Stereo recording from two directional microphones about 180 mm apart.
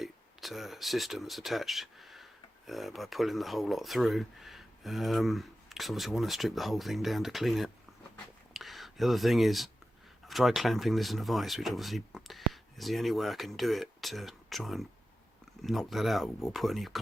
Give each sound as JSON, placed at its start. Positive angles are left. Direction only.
{"t": 0.0, "sound": "speech", "side_deg": 0}
{"t": 8.5, "sound": "a sound", "side_deg": 0}
{"t": 10.2, "sound": "speech", "side_deg": 0}